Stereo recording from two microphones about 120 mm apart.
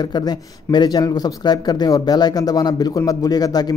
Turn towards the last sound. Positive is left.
turn(degrees=35)  # may be behind; listen again after turning